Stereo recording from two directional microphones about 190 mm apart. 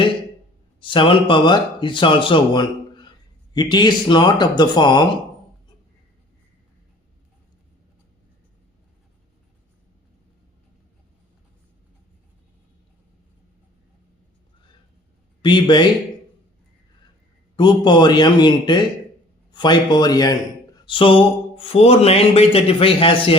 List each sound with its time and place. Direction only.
0.8 s speech: 25° left (ahead or behind)
15.4 s speech: 25° left (ahead or behind)
17.6 s speech: 25° left (ahead or behind)